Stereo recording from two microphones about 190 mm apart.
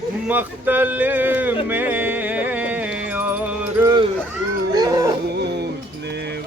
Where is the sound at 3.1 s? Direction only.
10° right (ahead or behind).